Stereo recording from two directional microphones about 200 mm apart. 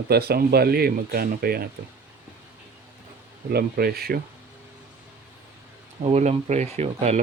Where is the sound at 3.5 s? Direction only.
50° right (ahead or behind).